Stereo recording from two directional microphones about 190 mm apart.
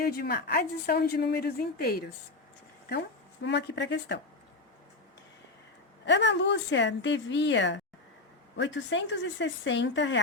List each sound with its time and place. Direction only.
0.0 s a woman's voice: 55° left (ahead or behind)
3.4 s a woman's voice: 70° left (ahead or behind)
6.1 s a woman's voice: 65° left (ahead or behind)